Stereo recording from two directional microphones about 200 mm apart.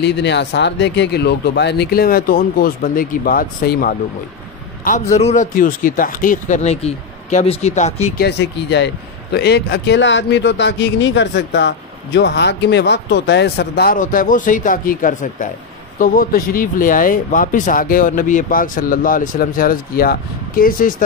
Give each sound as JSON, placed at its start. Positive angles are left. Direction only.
{"t": 0.0, "sound": "speech", "side_deg": 60}
{"t": 4.8, "sound": "speech", "side_deg": 35}
{"t": 8.2, "sound": "speech", "side_deg": 60}